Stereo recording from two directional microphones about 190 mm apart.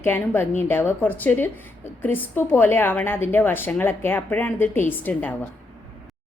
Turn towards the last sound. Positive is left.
turn(degrees=10)  # may be behind; listen again after turning